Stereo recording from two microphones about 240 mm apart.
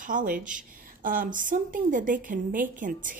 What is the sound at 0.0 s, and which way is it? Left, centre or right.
A woman's voice, right.